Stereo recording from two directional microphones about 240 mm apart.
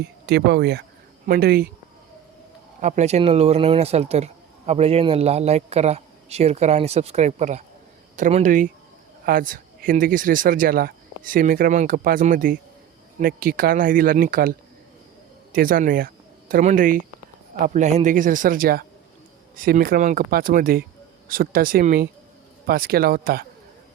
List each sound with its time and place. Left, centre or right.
0.3 s speech: right
2.8 s speech: right
15.5 s speech: right